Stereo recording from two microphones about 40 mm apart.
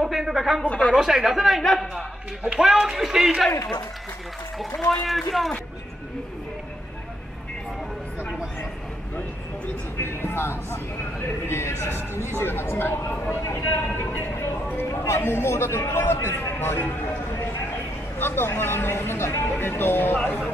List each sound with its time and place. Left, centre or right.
0.2 s a sound: centre
0.7 s speech: left
0.9 s speech: centre
2.6 s speech: centre
5.0 s speech: centre
9.9 s speech: left
11.4 s a sound: left
12.4 s a man's voice: left
18.2 s speech: left